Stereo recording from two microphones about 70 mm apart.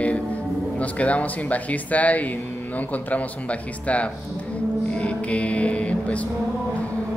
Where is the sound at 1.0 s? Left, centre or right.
Left.